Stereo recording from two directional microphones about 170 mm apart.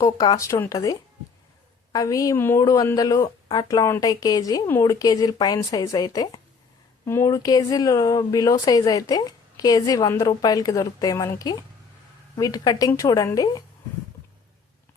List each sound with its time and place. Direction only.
0.0 s speech: 20° left (ahead or behind)